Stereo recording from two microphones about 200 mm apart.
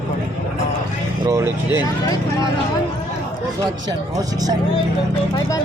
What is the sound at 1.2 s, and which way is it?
Speech, 15° right (ahead or behind).